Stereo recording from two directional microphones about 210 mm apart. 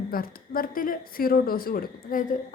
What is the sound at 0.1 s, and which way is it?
Speech, 45° left (ahead or behind).